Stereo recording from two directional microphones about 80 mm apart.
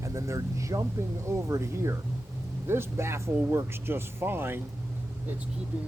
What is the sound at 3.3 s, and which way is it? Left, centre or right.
Speech, right.